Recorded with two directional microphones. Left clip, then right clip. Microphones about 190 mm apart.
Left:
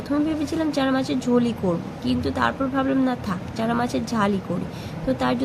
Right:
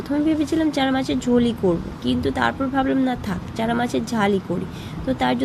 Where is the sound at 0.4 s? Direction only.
10° right (ahead or behind).